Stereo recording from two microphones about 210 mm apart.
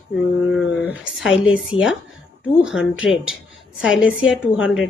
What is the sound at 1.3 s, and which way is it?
Speech, 65° left (ahead or behind).